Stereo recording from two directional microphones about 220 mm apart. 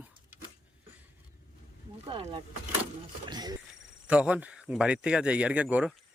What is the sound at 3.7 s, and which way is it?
Speech, 5° right (ahead or behind).